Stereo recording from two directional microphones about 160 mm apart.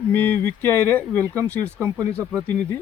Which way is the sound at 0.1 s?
10° left (ahead or behind).